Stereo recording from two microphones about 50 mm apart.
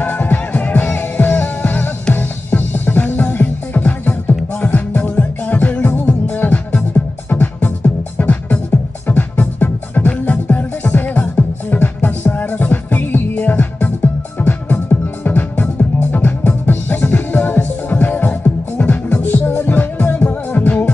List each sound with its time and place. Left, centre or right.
0.0 s music: left